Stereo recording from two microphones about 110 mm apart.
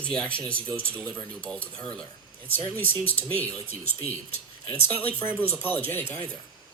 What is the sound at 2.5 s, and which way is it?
Speech, 15° left (ahead or behind).